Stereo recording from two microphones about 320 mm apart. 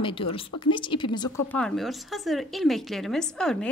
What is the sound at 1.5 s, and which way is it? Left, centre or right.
A woman's voice, centre.